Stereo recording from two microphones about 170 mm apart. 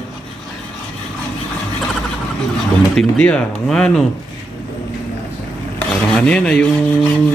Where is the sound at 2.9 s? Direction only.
5° left (ahead or behind).